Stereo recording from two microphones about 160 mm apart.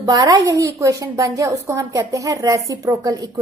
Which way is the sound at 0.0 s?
25° right (ahead or behind).